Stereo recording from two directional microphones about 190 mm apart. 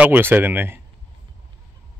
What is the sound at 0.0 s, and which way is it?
Speech, 10° right (ahead or behind).